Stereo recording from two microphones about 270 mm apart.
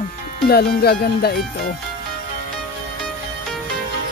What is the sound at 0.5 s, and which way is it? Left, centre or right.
Music, left.